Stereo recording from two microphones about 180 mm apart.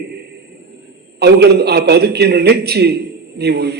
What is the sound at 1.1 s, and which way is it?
A man's voice, 65° right (ahead or behind).